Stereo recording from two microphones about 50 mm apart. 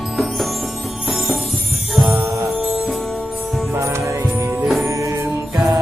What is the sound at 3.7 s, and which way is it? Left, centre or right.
Music, right.